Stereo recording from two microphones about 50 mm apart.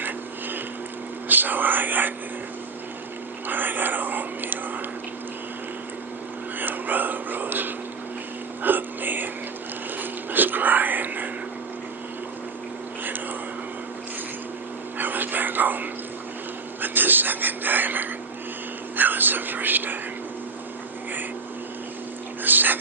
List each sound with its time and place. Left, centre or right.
0.0 s a sound: right
3.4 s whispering: right
6.6 s a sound: right
10.0 s mechanisms: right
14.9 s whispering: right
22.4 s dog: right